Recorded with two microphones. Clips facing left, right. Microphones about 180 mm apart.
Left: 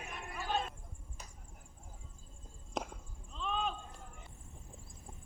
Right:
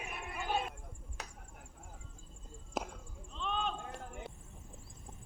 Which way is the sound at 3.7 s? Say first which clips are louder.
Right 7 dB; 75° right (ahead or behind).